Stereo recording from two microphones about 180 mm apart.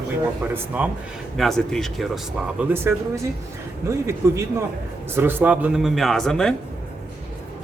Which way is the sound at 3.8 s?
15° right (ahead or behind).